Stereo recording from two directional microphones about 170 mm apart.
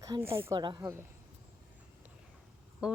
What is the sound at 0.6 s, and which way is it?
Speech, 25° right (ahead or behind).